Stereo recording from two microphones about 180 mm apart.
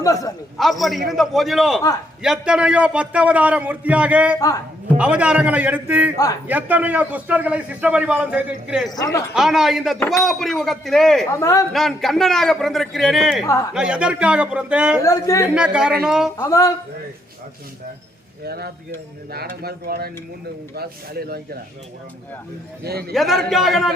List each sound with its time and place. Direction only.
0.0 s a man's voice: 20° left (ahead or behind)
0.6 s a man's voice: centre (ahead or behind)
4.4 s a man's voice: 20° left (ahead or behind)
4.9 s a man's voice: 5° right (ahead or behind)
11.3 s speech: 20° left (ahead or behind)
11.7 s a man's voice: centre (ahead or behind)
13.4 s speech: 20° left (ahead or behind)
13.7 s a man's voice: 5° right (ahead or behind)
15.0 s speech: 20° left (ahead or behind)
15.5 s a man's voice: 5° right (ahead or behind)
16.4 s speech: 20° left (ahead or behind)
18.4 s speech: 60° right (ahead or behind)
22.8 s speech: 60° right (ahead or behind)
23.1 s a man's voice: centre (ahead or behind)